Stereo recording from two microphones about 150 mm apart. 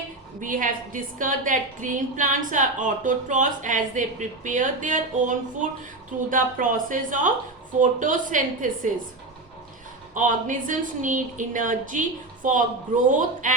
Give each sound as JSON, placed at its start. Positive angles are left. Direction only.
{"t": 0.3, "sound": "a woman's voice", "side_deg": -60}
{"t": 10.2, "sound": "a woman's voice", "side_deg": -60}